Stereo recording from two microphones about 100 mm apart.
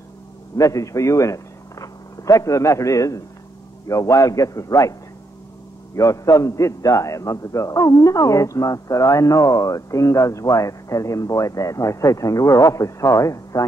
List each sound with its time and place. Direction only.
0.6 s a man's voice: 35° left (ahead or behind)
5.9 s a man's voice: 30° left (ahead or behind)